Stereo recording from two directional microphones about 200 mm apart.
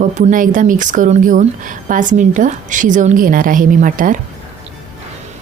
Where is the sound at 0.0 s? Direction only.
40° right (ahead or behind).